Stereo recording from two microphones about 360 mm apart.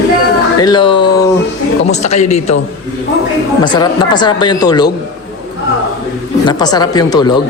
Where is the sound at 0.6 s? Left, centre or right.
Centre.